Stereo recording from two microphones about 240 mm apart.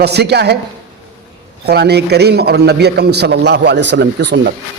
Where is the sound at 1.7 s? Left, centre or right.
Right.